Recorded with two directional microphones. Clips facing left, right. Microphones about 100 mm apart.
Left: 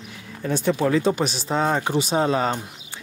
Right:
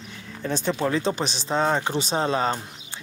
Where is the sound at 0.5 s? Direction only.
25° right (ahead or behind).